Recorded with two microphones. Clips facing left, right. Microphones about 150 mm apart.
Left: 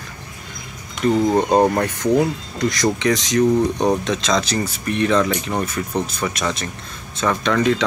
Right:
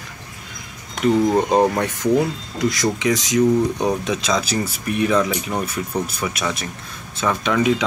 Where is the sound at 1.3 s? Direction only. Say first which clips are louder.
Left 1 dB; 5° right (ahead or behind).